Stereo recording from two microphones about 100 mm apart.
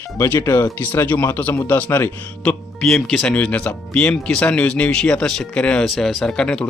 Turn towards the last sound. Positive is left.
turn(degrees=10)  # may be behind; listen again after turning